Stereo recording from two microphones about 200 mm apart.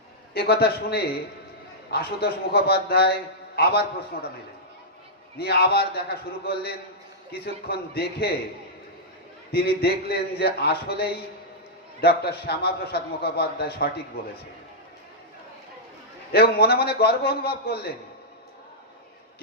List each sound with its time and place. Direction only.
0.3 s a man's voice: 55° left (ahead or behind)
5.4 s a man's voice: 55° left (ahead or behind)
9.5 s a man's voice: 50° left (ahead or behind)
16.3 s a man's voice: 50° left (ahead or behind)